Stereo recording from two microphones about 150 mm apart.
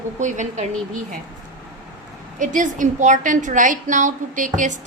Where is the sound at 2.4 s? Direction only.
60° right (ahead or behind).